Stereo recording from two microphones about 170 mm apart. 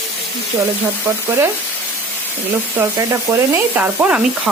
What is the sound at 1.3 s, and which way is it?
Sizzle, 15° right (ahead or behind).